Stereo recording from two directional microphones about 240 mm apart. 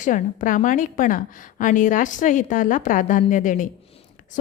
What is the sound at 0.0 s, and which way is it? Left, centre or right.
A woman's voice, left.